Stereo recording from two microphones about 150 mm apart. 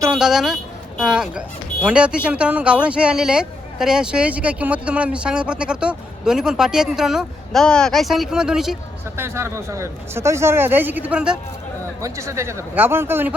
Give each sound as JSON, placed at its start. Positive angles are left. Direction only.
{"t": 0.1, "sound": "speech", "side_deg": -5}
{"t": 9.1, "sound": "speech", "side_deg": -15}
{"t": 12.0, "sound": "speech", "side_deg": -20}